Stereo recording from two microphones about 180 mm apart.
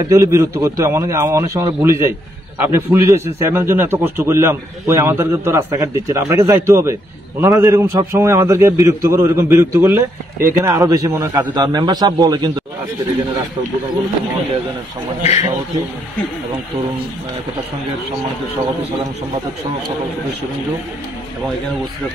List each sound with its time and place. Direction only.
0.1 s a man's voice: 15° right (ahead or behind)